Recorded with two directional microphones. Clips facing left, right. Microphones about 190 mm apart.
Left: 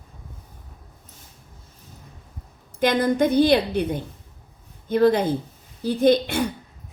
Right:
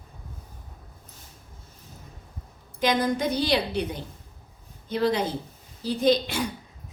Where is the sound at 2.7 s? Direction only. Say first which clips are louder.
Left 4 dB; 55° left (ahead or behind).